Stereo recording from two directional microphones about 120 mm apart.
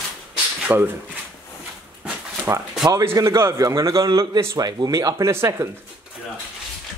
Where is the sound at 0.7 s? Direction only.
15° right (ahead or behind).